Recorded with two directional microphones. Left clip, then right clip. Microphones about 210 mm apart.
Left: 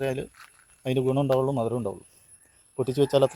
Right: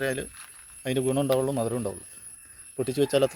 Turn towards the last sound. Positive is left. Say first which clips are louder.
# left 2 dB
turn(degrees=0)  # may be behind; listen again after turning